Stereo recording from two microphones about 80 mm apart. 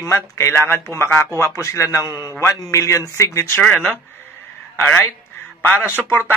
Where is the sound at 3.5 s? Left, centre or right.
Left.